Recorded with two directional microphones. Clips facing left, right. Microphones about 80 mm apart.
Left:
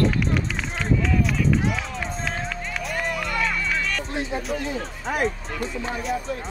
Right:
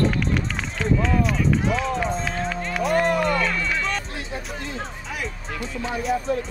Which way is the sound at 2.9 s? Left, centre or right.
Right.